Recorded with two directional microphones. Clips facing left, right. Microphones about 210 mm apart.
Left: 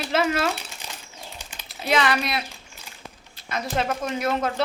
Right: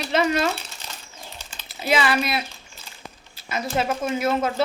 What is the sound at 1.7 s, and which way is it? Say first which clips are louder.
Speech: right 1 dB; centre (ahead or behind).